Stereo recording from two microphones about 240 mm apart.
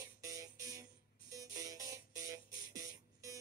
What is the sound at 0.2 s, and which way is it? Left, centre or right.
Music, centre.